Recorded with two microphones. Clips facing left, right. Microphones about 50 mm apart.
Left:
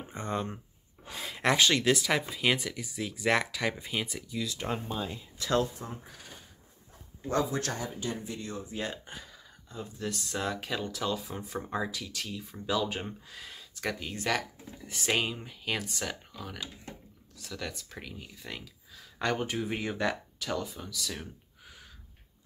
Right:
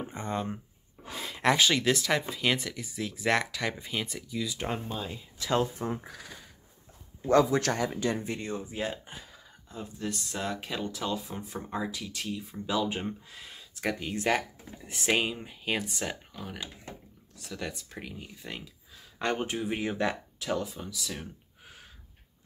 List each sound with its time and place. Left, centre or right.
0.1 s speech: centre
4.5 s speech: centre
4.7 s speech: centre
5.8 s speech: right
7.2 s speech: right
8.2 s speech: right
8.6 s speech: centre
11.3 s speech: centre
11.9 s speech: centre
14.2 s speech: right
15.0 s speech: centre